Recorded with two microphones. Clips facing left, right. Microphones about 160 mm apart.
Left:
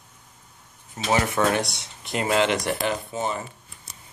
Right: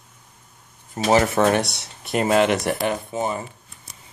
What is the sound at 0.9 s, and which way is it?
Speech, 35° right (ahead or behind).